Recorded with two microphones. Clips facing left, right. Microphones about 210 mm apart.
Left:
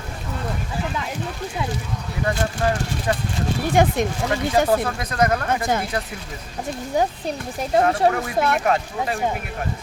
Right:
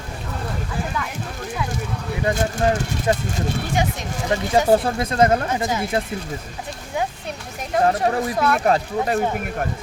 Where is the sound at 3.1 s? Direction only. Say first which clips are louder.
Right 3 dB; 25° right (ahead or behind).